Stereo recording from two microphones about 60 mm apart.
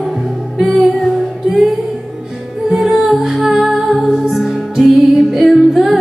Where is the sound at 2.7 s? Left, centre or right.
Centre.